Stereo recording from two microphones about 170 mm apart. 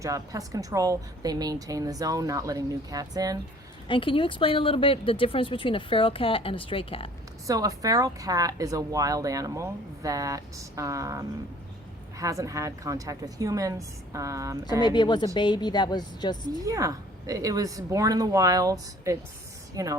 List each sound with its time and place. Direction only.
0.0 s speech: 20° right (ahead or behind)
3.8 s speech: 30° left (ahead or behind)
7.4 s speech: 20° right (ahead or behind)
14.6 s a woman's voice: 25° left (ahead or behind)
16.6 s speech: 20° right (ahead or behind)